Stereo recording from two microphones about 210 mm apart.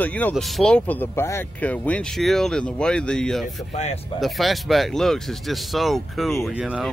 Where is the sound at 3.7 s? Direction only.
35° left (ahead or behind).